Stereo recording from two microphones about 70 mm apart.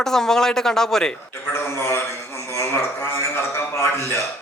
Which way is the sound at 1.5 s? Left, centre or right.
Left.